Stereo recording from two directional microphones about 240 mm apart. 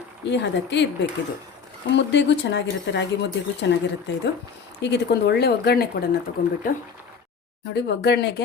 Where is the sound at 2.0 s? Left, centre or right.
Left.